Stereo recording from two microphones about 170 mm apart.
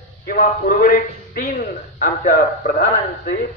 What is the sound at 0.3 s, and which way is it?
A man's voice, 55° left (ahead or behind).